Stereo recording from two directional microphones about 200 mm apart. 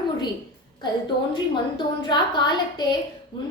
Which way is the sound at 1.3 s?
20° left (ahead or behind).